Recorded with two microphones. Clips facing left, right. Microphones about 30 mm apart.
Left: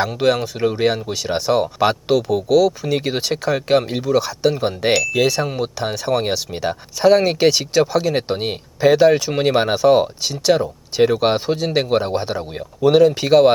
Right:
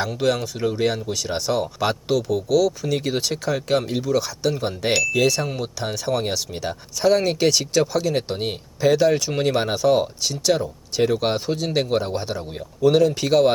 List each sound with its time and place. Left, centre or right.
0.0 s speech: centre